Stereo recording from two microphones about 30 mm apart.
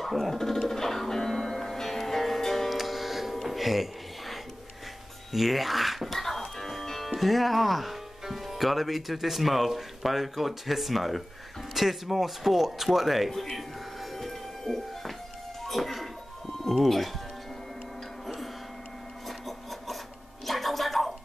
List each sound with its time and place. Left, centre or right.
0.0 s speech: centre
0.7 s music: centre
5.3 s speech: centre
6.1 s music: centre
7.1 s speech: centre
13.3 s speech: centre
14.1 s music: centre
16.6 s speech: centre
18.2 s music: centre
19.2 s a sound: centre
20.4 s music: centre